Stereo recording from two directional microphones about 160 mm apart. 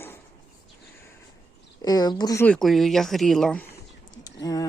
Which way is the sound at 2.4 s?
5° left (ahead or behind).